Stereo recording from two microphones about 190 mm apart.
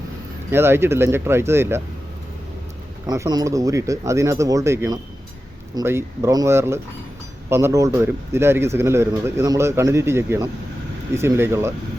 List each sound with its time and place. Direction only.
0.5 s speech: 10° right (ahead or behind)
3.1 s speech: 20° right (ahead or behind)